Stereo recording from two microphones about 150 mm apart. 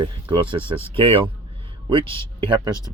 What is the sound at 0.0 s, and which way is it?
A man's voice, 30° right (ahead or behind).